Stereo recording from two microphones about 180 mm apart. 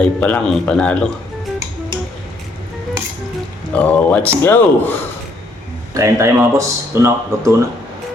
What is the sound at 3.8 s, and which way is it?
Speech, 10° left (ahead or behind).